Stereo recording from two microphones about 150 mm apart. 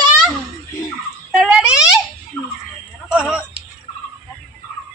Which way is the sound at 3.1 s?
5° right (ahead or behind).